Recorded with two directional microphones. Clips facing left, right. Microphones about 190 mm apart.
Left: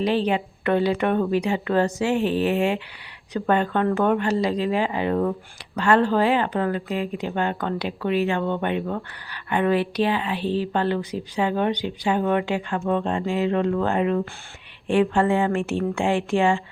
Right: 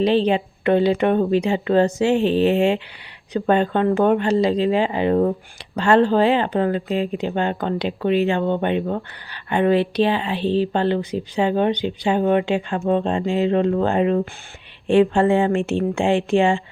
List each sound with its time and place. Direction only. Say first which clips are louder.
0.0 s speech: right 4 dB; 25° right (ahead or behind)